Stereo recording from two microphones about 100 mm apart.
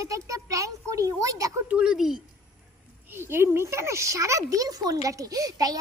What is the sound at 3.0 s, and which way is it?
Speech, 20° right (ahead or behind).